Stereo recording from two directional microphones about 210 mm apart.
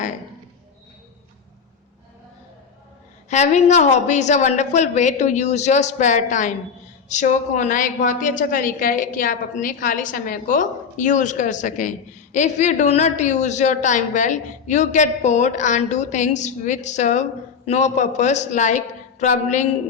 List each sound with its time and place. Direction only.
3.2 s a woman's voice: 35° left (ahead or behind)